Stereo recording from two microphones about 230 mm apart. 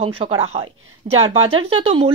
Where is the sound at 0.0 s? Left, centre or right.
Right.